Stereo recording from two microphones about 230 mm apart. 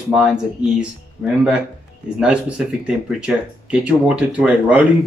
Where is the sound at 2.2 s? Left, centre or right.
Centre.